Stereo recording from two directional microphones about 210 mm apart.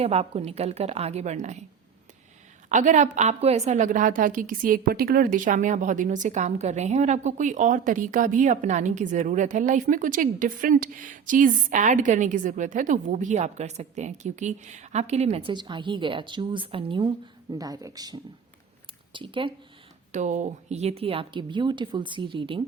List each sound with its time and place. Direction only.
0.0 s a woman's voice: 30° right (ahead or behind)
2.6 s a woman's voice: 35° right (ahead or behind)
20.1 s a woman's voice: 35° right (ahead or behind)